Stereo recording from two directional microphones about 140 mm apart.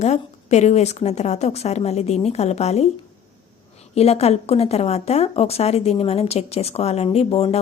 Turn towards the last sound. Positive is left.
turn(degrees=45)  # may be behind; listen again after turning